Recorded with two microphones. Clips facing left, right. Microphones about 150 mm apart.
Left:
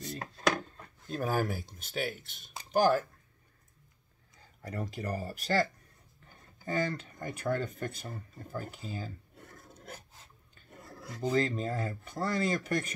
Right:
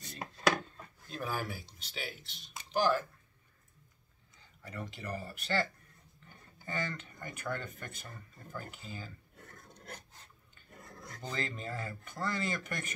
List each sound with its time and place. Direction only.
0.0 s chopping: centre (ahead or behind)
1.1 s speech: 45° left (ahead or behind)
4.6 s speech: 40° left (ahead or behind)
9.8 s a sound: 5° left (ahead or behind)
10.8 s filing: 5° left (ahead or behind)
11.3 s speech: 35° left (ahead or behind)